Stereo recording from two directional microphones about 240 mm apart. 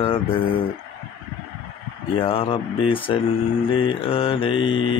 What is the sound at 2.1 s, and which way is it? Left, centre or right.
Mantra, left.